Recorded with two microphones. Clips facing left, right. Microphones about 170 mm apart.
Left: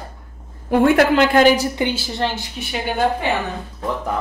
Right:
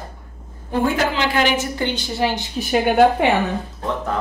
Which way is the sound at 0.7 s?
60° left (ahead or behind).